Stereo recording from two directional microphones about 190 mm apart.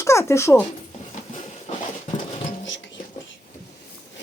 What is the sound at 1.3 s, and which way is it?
Clip-clop, 40° left (ahead or behind).